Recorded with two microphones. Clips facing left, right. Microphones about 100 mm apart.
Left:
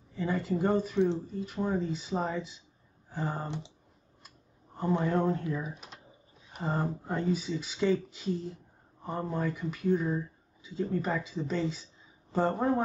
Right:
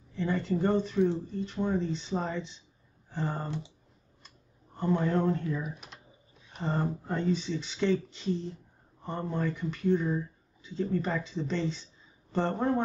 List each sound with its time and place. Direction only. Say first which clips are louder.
0.1 s speech: right 1 dB; 5° left (ahead or behind)
3.4 s speech: right 1 dB; 20° left (ahead or behind)
4.7 s speech: right 1 dB; 10° left (ahead or behind)